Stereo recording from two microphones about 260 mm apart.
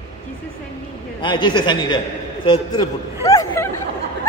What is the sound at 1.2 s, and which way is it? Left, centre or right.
Speech, centre.